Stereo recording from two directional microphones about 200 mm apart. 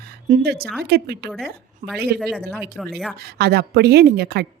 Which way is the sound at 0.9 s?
55° right (ahead or behind).